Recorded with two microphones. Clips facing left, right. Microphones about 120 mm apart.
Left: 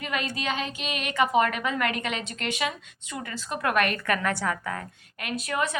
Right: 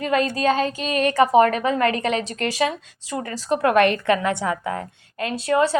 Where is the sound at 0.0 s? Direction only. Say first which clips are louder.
Right 10 dB; 35° right (ahead or behind).